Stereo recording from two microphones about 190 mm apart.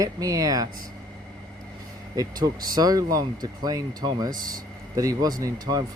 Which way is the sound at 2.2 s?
20° right (ahead or behind).